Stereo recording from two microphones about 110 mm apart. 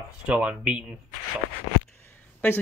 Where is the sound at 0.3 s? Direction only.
10° right (ahead or behind).